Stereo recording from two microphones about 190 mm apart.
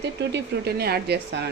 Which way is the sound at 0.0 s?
65° right (ahead or behind).